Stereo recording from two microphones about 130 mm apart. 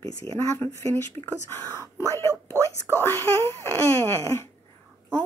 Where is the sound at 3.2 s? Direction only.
20° left (ahead or behind).